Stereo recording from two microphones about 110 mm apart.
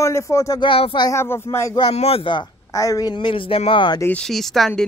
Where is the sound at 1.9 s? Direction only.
70° left (ahead or behind); by 2.4 s 50° left (ahead or behind).